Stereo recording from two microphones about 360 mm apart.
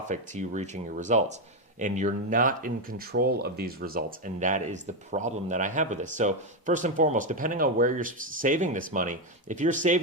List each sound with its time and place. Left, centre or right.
0.1 s speech: centre